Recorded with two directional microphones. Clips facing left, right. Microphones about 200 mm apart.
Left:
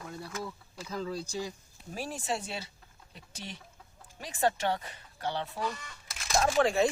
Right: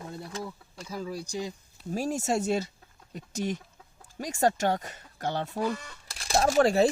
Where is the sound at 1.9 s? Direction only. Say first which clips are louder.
Right 7 dB; 45° right (ahead or behind).